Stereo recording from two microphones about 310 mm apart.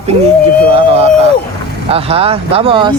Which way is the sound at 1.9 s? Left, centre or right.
Centre.